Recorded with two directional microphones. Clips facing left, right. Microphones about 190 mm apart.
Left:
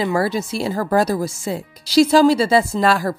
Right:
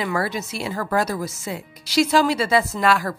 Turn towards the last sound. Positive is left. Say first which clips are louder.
# left 3 dB
turn(degrees=35)  # may be behind; listen again after turning